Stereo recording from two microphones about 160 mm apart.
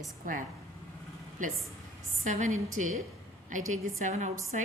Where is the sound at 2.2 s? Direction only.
50° right (ahead or behind).